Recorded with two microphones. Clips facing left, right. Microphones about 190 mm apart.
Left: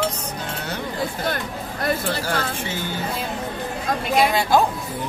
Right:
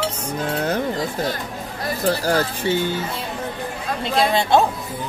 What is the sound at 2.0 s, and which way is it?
Speech, 40° right (ahead or behind).